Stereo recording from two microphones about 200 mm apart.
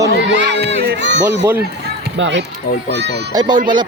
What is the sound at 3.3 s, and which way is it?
Speech, 20° right (ahead or behind).